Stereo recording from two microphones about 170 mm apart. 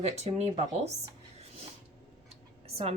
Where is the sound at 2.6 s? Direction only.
35° right (ahead or behind).